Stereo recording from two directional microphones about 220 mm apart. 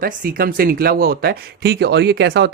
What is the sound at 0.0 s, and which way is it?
Speech, 40° right (ahead or behind).